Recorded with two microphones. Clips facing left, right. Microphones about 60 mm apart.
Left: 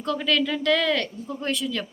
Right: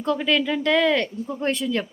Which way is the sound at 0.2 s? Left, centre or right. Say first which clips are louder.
Right 2 dB; centre.